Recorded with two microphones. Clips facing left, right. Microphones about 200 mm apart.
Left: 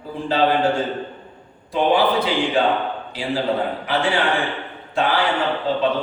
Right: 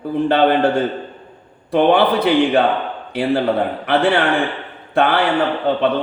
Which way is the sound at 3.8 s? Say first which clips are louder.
Right 7 dB; 60° right (ahead or behind).